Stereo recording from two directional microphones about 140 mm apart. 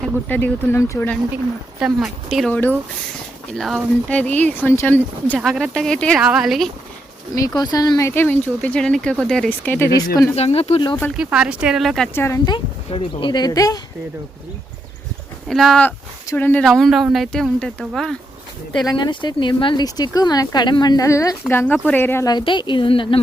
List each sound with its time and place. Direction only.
0.0 s speech: 10° left (ahead or behind)
1.8 s speech: centre (ahead or behind)
3.6 s speech: 5° left (ahead or behind)
5.5 s speech: centre (ahead or behind)
7.3 s speech: 25° left (ahead or behind)
10.3 s speech: 45° left (ahead or behind)
11.1 s speech: 5° right (ahead or behind)
12.1 s speech: 15° left (ahead or behind)
12.5 s speech: 35° left (ahead or behind)
15.4 s speech: centre (ahead or behind)
18.9 s speech: 30° left (ahead or behind); by 22.3 s 15° left (ahead or behind)
22.3 s speech: 35° left (ahead or behind)